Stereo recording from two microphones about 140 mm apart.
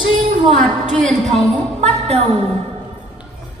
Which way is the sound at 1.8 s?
50° right (ahead or behind).